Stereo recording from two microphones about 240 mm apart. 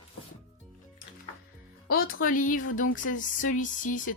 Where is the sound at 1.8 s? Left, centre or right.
Left.